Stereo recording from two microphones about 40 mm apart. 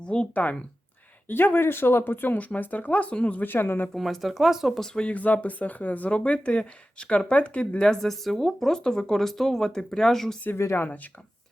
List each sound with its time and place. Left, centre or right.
0.0 s speech: left
1.3 s speech: left
3.4 s speech: left
3.9 s speech: centre
5.1 s speech: left
6.1 s speech: left
7.8 s speech: centre
8.1 s speech: centre
10.6 s speech: left
10.8 s speech: left